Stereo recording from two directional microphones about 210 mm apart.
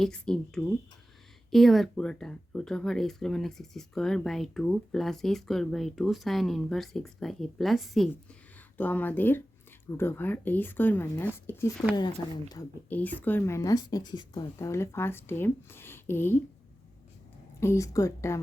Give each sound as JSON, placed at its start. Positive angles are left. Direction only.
{"t": 0.0, "sound": "a woman's voice", "side_deg": 5}
{"t": 12.9, "sound": "a woman's voice", "side_deg": 10}
{"t": 17.6, "sound": "a woman's voice", "side_deg": 15}